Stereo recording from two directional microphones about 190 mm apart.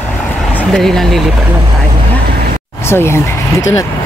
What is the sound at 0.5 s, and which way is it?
Speech, centre (ahead or behind).